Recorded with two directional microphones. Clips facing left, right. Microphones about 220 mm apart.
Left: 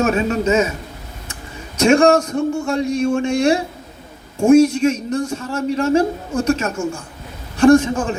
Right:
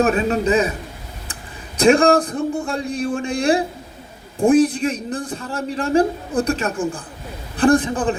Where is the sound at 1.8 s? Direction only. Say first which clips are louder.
Left 1 dB; 35° right (ahead or behind).